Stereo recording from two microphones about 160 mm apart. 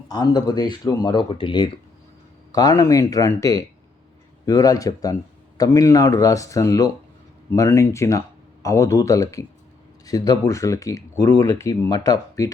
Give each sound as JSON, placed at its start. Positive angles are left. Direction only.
{"t": 0.1, "sound": "speech", "side_deg": 25}